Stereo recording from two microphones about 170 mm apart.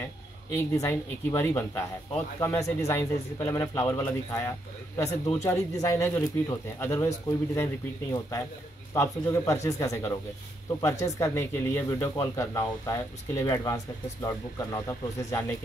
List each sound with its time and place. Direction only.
0.6 s speech: 15° left (ahead or behind)